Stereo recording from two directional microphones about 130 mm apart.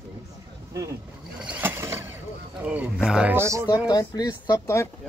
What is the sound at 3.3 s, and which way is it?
Speech, 20° right (ahead or behind).